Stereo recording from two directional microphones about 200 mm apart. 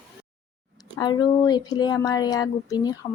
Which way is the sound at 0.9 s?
20° left (ahead or behind).